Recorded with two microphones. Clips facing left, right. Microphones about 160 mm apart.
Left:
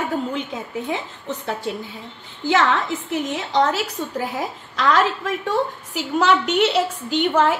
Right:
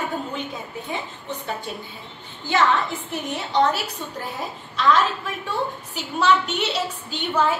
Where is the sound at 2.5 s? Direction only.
90° left.